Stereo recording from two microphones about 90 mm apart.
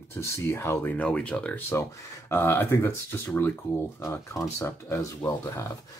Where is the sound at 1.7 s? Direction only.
25° left (ahead or behind).